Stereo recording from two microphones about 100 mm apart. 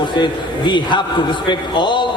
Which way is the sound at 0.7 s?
50° left (ahead or behind).